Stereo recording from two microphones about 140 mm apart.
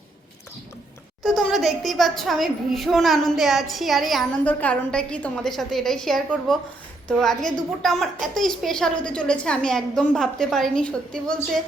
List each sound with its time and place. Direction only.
1.4 s a woman's voice: centre (ahead or behind)